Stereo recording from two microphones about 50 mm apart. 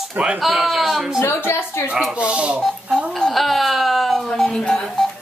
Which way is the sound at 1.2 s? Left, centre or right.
Left.